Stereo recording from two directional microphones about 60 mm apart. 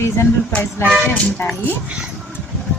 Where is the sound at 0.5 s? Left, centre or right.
Left.